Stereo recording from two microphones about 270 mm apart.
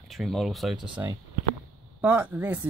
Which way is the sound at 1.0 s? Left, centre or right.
Centre.